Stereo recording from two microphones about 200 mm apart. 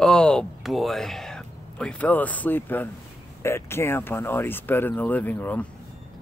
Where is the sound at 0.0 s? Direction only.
5° left (ahead or behind).